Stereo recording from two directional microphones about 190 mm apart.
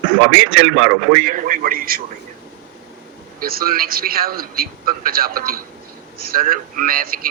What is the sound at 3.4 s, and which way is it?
A man's voice, 50° right (ahead or behind).